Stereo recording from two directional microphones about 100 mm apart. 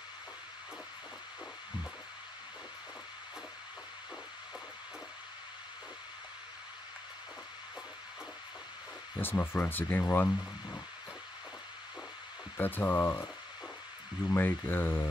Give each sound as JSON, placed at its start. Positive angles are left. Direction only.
{"t": 9.2, "sound": "speech", "side_deg": 20}
{"t": 12.5, "sound": "speech", "side_deg": 20}